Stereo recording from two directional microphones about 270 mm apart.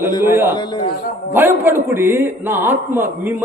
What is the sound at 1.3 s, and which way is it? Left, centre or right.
A man's voice, centre.